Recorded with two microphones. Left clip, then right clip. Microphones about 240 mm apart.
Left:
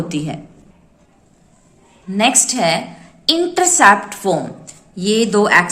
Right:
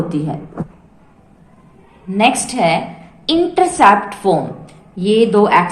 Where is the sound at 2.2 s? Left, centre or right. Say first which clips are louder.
Right 1 dB; left.